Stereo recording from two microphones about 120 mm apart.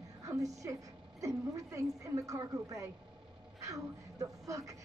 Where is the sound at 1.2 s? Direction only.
25° right (ahead or behind).